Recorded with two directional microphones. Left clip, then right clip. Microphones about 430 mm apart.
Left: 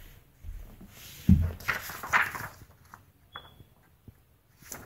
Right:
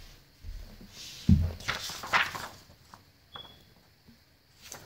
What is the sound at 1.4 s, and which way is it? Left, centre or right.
Walk, centre.